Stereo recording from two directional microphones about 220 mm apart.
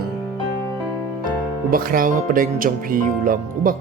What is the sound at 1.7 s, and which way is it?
Speech, 40° right (ahead or behind).